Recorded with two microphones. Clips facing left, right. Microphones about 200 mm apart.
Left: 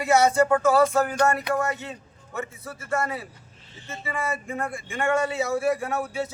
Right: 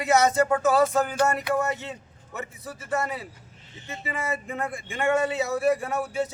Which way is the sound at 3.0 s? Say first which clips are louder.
Left 1 dB; 20° right (ahead or behind).